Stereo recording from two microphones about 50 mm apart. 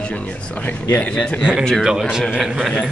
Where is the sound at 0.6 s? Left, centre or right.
Left.